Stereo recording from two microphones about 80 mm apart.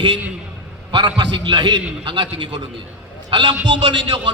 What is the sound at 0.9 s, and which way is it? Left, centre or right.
A man's voice, right.